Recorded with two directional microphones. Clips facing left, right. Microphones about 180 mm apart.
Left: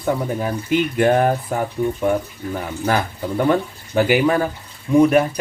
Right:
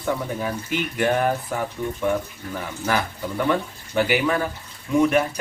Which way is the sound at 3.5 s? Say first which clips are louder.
Left 4 dB; 40° left (ahead or behind).